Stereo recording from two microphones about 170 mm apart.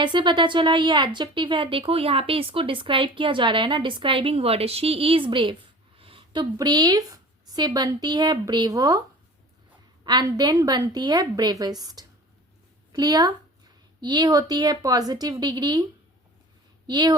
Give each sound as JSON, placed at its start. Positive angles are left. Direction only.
{"t": 0.0, "sound": "a woman's voice", "side_deg": -25}
{"t": 10.0, "sound": "speech", "side_deg": -25}
{"t": 16.8, "sound": "speech", "side_deg": -25}